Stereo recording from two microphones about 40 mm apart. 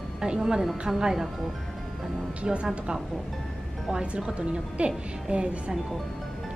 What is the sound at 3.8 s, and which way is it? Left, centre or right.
A woman's voice, right.